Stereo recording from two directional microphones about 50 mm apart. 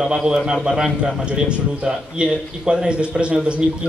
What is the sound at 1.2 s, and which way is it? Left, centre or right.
A man's voice, right.